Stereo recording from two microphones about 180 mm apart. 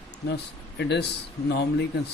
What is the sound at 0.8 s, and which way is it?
Speech, 70° left (ahead or behind).